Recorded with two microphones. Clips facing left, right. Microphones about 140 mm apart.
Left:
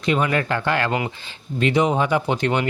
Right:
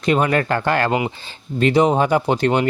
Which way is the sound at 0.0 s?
45° right (ahead or behind).